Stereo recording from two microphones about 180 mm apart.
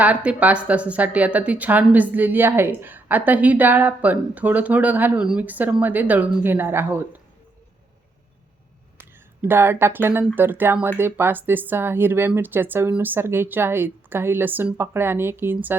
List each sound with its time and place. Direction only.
0.0 s speech: 10° right (ahead or behind)
9.0 s speech: 10° right (ahead or behind)